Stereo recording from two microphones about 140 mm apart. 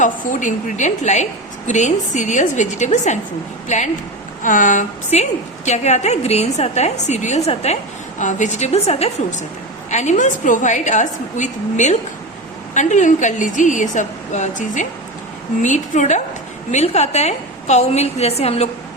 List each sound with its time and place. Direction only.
0.0 s a woman's voice: 65° left (ahead or behind)
8.2 s a woman's voice: 60° left (ahead or behind)